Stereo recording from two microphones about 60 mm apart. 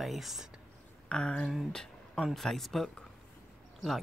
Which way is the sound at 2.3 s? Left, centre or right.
Centre.